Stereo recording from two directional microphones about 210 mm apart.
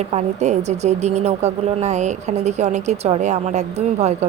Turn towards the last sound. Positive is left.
turn(degrees=-30)  # may be behind; listen again after turning